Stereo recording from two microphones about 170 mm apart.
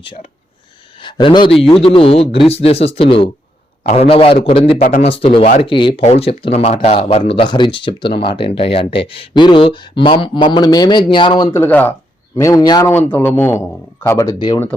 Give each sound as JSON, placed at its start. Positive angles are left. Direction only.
{"t": 0.0, "sound": "speech", "side_deg": 30}
{"t": 4.8, "sound": "speech", "side_deg": 50}
{"t": 5.0, "sound": "speech", "side_deg": 35}
{"t": 11.5, "sound": "speech", "side_deg": 10}